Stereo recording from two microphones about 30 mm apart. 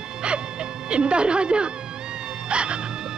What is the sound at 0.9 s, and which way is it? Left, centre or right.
A woman's voice, right.